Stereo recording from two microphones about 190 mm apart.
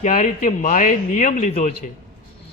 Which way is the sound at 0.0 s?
40° left (ahead or behind).